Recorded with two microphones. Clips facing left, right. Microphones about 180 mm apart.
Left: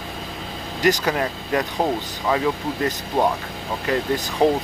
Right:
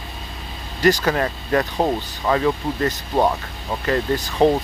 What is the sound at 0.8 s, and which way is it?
Speech, 15° left (ahead or behind).